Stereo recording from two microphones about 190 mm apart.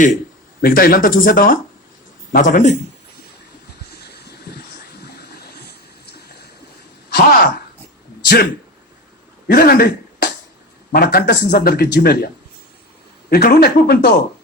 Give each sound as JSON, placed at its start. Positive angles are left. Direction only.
{"t": 0.6, "sound": "speech", "side_deg": 50}
{"t": 4.1, "sound": "a sound", "side_deg": 60}
{"t": 5.2, "sound": "water", "side_deg": 60}
{"t": 7.1, "sound": "speech", "side_deg": 55}
{"t": 9.5, "sound": "speech", "side_deg": 50}
{"t": 13.3, "sound": "speech", "side_deg": 55}